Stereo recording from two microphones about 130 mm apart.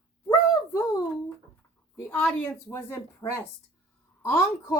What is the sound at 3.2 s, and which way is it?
Speech, 30° left (ahead or behind).